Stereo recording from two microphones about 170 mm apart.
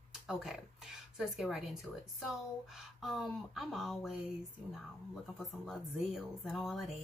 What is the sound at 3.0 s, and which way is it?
Speech, centre (ahead or behind).